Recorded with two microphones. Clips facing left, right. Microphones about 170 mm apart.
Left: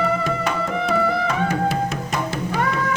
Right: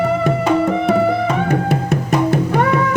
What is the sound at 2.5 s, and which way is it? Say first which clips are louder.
Music: right 7 dB; 55° right (ahead or behind).